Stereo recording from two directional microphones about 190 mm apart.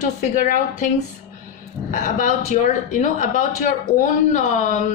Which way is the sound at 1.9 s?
40° left (ahead or behind).